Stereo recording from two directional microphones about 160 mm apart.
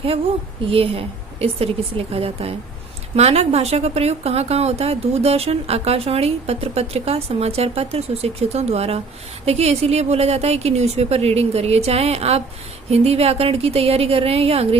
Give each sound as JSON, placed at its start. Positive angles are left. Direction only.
{"t": 0.6, "sound": "a woman's voice", "side_deg": -35}